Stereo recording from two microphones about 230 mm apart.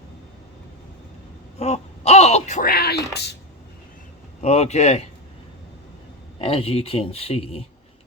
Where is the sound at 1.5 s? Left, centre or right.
Left.